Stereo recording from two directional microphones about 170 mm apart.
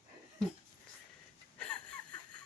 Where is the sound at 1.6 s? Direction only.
5° left (ahead or behind).